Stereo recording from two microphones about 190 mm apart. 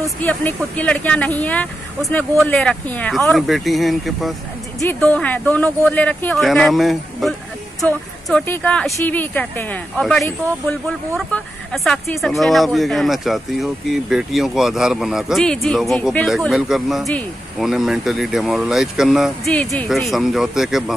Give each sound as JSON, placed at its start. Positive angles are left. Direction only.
{"t": 0.2, "sound": "speech", "side_deg": 10}